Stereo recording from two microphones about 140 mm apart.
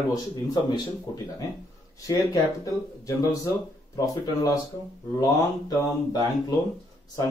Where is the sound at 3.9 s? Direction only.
25° left (ahead or behind).